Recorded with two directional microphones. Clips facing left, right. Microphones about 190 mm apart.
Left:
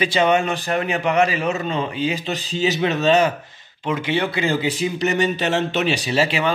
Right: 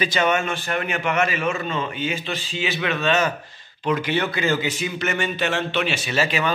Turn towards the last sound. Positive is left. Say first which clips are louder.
# left 3 dB
turn(degrees=30)  # may be behind; listen again after turning